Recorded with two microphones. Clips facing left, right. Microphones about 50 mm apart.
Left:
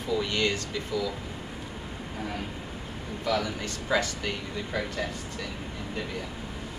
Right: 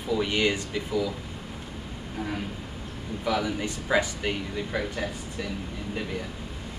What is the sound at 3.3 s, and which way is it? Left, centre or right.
Speech, centre.